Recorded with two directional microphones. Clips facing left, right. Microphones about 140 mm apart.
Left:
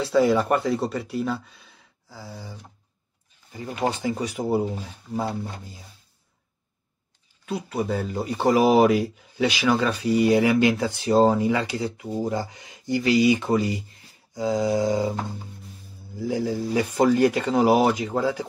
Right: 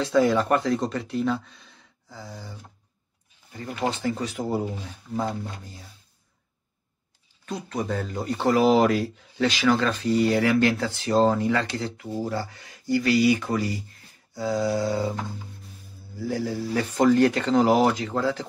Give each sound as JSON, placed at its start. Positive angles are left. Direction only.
{"t": 0.0, "sound": "speech", "side_deg": 5}
{"t": 7.4, "sound": "speech", "side_deg": 5}
{"t": 16.2, "sound": "speech", "side_deg": 15}